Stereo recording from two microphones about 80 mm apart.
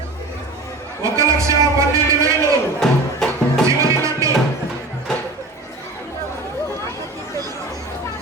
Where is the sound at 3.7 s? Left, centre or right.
Right.